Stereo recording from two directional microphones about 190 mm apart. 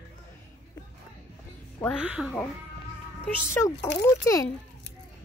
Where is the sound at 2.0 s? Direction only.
5° right (ahead or behind).